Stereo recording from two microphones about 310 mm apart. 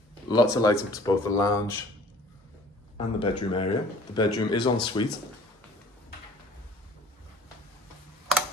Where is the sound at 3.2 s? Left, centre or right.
Centre.